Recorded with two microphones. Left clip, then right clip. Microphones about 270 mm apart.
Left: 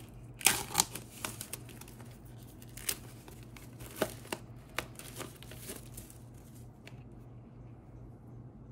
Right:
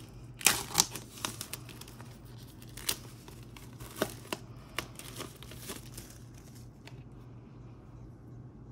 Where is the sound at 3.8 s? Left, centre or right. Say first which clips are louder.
Even; centre.